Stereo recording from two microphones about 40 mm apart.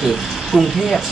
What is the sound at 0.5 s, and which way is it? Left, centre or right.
Speech, right.